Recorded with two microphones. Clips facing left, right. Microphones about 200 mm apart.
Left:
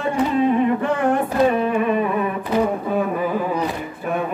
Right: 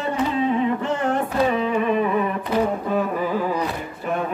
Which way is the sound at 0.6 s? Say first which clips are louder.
Left 3 dB; 55° left (ahead or behind).